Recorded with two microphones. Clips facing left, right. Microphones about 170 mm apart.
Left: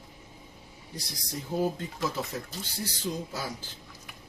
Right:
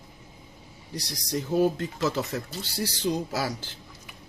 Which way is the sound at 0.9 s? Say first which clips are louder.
Right 8 dB; 80° right.